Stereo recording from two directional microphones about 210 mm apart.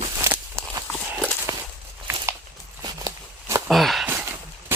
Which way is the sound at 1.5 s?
15° right (ahead or behind).